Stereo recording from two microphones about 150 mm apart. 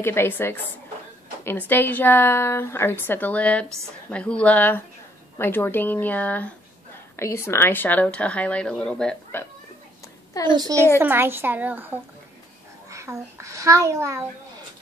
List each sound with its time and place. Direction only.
0.0 s speech: 15° left (ahead or behind)
10.5 s a child's voice: 25° right (ahead or behind)